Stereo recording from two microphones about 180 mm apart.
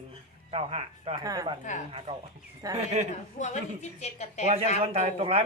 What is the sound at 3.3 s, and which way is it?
Speech, 40° left (ahead or behind).